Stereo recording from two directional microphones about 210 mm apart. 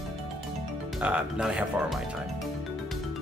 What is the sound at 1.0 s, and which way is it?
Speech, 5° right (ahead or behind).